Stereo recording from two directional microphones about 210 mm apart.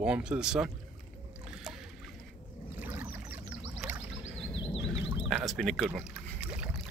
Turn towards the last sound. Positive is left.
turn(degrees=-5)  # may be behind; listen again after turning